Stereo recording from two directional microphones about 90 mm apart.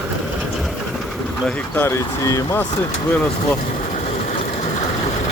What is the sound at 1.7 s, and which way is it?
Speech, 30° left (ahead or behind).